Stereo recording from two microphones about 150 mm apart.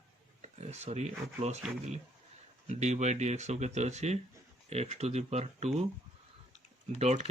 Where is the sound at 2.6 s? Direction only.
50° right (ahead or behind).